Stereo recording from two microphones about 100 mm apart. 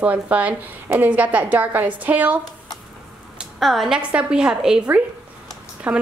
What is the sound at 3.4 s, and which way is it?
A woman's voice, centre (ahead or behind).